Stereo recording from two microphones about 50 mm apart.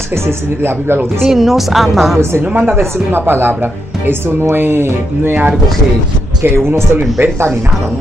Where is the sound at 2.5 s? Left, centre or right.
Right.